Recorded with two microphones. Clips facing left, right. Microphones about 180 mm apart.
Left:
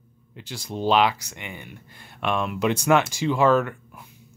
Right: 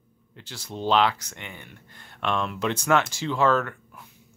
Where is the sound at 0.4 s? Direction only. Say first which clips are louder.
Left 4 dB; 15° left (ahead or behind).